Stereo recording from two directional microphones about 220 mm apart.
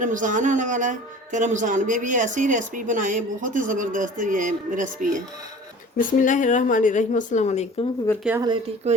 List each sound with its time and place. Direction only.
0.0 s a woman's voice: 35° right (ahead or behind)
6.0 s a woman's voice: 35° left (ahead or behind)
8.2 s speech: 10° right (ahead or behind)